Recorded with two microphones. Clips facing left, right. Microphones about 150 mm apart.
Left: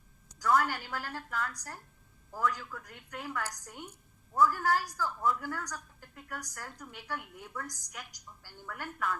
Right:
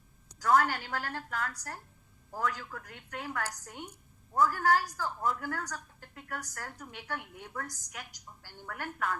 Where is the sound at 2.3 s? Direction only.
40° right (ahead or behind).